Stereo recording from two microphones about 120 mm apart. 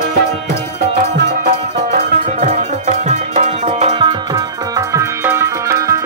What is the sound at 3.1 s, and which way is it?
Music, 80° right.